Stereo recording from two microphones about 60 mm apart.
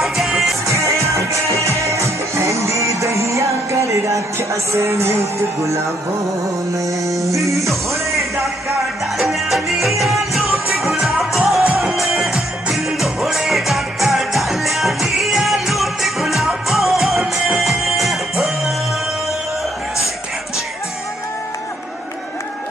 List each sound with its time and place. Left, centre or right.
0.7 s music: right
6.7 s music: right
9.2 s music: centre